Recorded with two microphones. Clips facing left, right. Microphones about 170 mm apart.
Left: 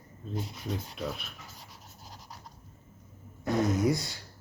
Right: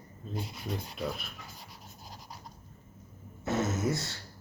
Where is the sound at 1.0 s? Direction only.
Centre (ahead or behind).